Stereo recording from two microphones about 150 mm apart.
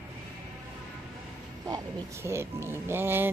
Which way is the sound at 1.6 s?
20° right (ahead or behind).